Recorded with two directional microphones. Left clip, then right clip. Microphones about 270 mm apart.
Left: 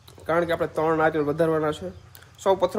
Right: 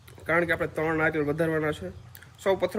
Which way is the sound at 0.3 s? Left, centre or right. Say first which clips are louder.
Left 2 dB; centre.